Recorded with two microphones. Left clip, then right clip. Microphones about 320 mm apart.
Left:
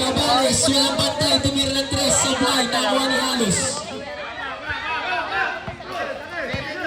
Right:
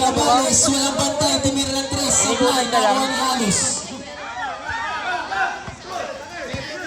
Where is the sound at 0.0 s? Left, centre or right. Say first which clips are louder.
Right 2 dB; centre.